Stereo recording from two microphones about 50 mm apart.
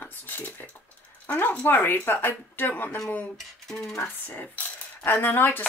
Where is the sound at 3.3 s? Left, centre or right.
Centre.